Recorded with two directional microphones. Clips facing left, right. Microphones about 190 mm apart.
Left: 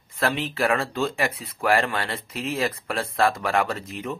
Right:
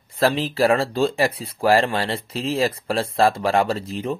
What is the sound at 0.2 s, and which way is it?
Speech, 35° right (ahead or behind).